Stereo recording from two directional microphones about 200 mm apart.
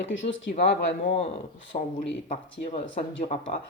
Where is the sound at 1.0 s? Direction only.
30° left (ahead or behind).